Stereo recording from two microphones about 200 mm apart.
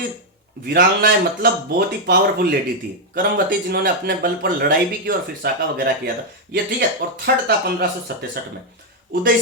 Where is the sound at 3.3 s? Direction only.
50° right (ahead or behind).